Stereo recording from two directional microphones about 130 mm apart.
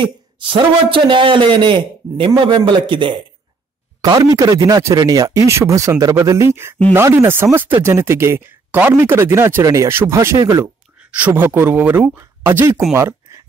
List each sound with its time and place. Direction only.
0.0 s a man's voice: 40° right (ahead or behind); by 10.7 s 25° right (ahead or behind)
11.0 s speech: 10° right (ahead or behind)
12.9 s a sound: 20° right (ahead or behind)